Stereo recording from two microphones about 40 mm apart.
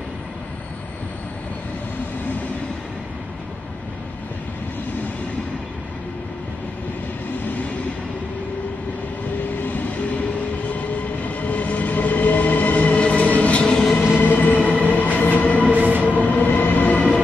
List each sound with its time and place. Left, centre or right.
9.6 s vehicle: left
11.2 s train: left
14.0 s train: left
15.7 s train: right
16.0 s train: left